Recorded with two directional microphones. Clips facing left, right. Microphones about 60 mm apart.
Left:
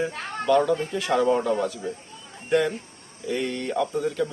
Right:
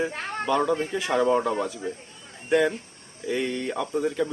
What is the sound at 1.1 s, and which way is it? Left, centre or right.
Speech, centre.